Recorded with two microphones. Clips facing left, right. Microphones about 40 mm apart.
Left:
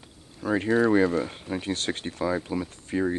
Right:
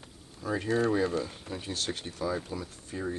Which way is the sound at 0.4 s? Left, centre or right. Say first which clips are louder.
Left 6 dB; left.